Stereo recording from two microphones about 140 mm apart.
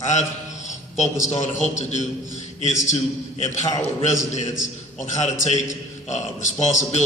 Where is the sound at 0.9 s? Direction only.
55° left (ahead or behind).